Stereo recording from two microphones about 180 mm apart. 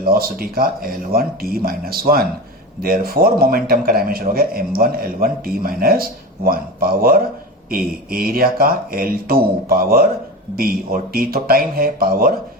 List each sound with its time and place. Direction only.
0.0 s a man's voice: 55° right (ahead or behind)